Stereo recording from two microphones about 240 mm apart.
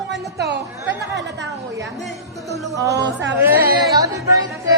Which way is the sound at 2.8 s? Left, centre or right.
Centre.